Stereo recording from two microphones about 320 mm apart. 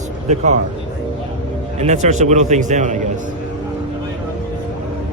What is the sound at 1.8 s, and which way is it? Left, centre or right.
A man's voice, right.